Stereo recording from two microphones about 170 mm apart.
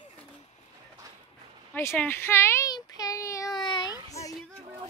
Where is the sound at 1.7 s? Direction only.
15° left (ahead or behind).